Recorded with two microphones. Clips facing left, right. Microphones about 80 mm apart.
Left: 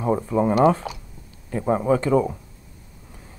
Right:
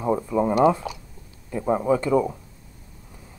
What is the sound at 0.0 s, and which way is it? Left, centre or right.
Speech, left.